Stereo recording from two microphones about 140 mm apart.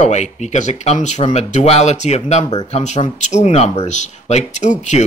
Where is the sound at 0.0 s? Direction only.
55° left (ahead or behind).